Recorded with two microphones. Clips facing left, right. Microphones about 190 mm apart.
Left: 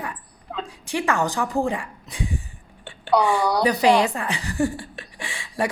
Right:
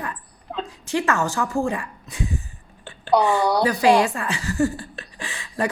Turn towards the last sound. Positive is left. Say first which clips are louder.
# even
turn(degrees=10)  # may be behind; listen again after turning